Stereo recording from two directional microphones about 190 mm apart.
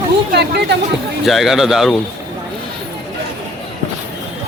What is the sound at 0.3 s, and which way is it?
Speech, 60° right (ahead or behind).